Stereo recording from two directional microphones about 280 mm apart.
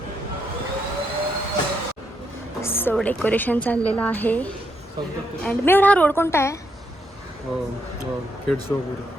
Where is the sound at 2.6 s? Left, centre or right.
Centre.